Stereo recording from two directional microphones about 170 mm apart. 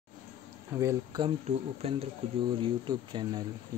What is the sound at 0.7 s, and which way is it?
Speech, 20° right (ahead or behind).